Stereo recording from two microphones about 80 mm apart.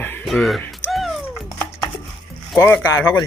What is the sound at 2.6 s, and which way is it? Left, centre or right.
Speech, left.